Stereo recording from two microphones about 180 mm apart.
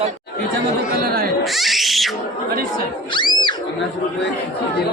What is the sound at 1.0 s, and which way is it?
Speech, 60° right (ahead or behind).